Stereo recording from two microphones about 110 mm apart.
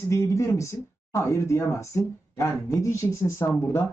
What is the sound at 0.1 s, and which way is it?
Speech, 25° left (ahead or behind).